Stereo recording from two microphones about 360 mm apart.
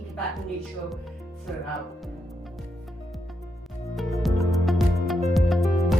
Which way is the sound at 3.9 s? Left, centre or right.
Centre.